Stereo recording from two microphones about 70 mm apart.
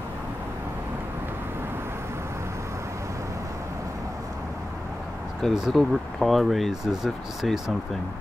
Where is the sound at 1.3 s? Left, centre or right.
Right.